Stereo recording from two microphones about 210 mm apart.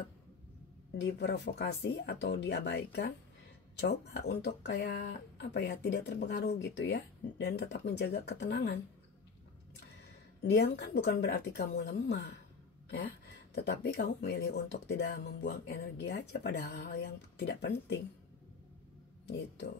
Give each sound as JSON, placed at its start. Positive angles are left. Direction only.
{"t": 1.0, "sound": "speech", "side_deg": 55}
{"t": 10.4, "sound": "speech", "side_deg": 55}
{"t": 19.2, "sound": "speech", "side_deg": 55}